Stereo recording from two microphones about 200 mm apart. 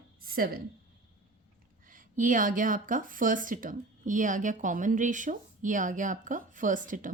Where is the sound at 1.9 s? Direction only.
40° right (ahead or behind).